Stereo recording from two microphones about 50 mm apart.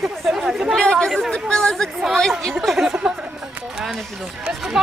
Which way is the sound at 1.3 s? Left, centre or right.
Centre.